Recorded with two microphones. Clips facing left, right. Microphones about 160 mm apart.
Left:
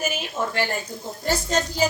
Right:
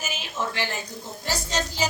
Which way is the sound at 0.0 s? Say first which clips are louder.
Left 4 dB; 50° left (ahead or behind).